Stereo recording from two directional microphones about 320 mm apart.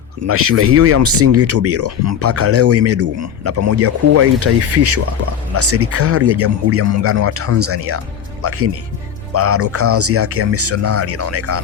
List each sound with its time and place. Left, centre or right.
0.3 s speech: right